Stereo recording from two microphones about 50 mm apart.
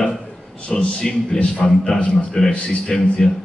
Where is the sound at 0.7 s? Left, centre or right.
Centre.